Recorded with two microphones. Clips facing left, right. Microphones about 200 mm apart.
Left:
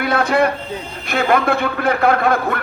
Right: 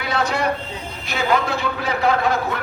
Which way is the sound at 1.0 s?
55° left (ahead or behind).